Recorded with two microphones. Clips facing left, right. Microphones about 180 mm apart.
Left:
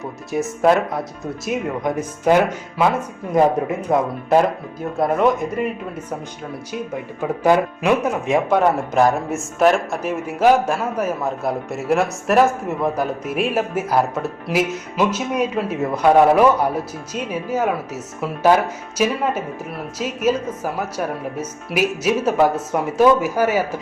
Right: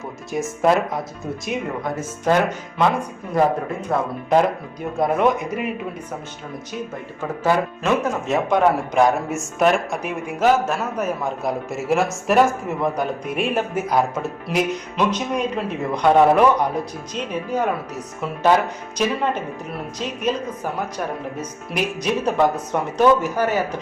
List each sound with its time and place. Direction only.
0.3 s speech: centre (ahead or behind)
1.8 s speech: 15° left (ahead or behind)
4.9 s speech: centre (ahead or behind)
7.2 s speech: 15° left (ahead or behind)
21.3 s speech: 5° left (ahead or behind)